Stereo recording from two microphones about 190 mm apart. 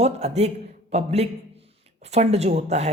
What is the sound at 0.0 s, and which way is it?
A man's voice, 35° right (ahead or behind).